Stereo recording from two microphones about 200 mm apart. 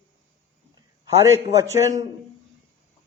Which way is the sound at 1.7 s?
15° right (ahead or behind).